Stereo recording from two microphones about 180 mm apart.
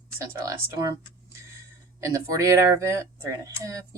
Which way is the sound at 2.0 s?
15° right (ahead or behind).